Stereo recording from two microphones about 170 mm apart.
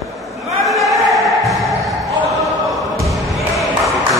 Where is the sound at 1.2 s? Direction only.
Centre (ahead or behind).